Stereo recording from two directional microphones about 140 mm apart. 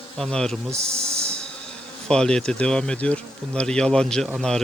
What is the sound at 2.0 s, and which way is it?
Speech, 5° left (ahead or behind).